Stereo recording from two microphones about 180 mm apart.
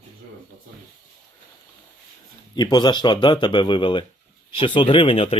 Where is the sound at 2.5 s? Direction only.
25° left (ahead or behind).